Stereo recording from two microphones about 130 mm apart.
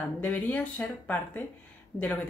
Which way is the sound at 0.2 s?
10° left (ahead or behind).